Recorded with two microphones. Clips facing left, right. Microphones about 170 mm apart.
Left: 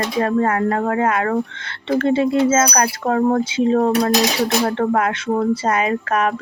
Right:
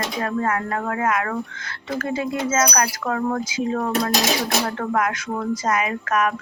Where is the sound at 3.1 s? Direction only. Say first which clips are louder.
Left 8 dB; 40° left (ahead or behind).